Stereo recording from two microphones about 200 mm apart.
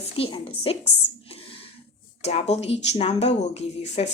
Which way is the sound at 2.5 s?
30° left (ahead or behind).